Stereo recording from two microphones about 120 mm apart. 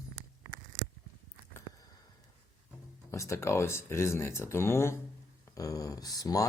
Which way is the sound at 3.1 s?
25° left (ahead or behind).